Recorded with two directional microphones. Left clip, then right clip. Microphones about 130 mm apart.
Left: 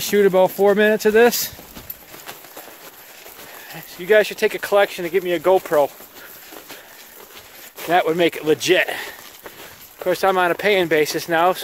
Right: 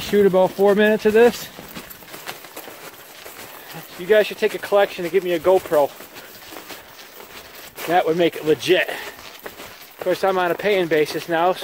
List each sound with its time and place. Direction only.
0.1 s speech: 50° left (ahead or behind)
4.1 s speech: 50° left (ahead or behind)
7.9 s speech: 55° left (ahead or behind)
10.0 s speech: 65° left (ahead or behind)